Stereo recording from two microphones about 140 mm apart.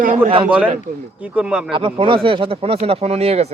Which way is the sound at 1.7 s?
35° right (ahead or behind).